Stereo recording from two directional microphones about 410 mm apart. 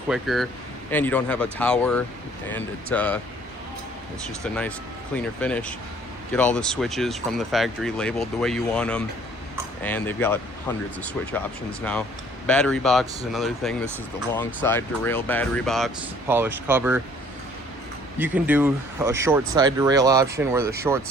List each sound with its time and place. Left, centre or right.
0.1 s speech: centre
5.4 s speech: centre
12.5 s speech: centre
18.2 s speech: centre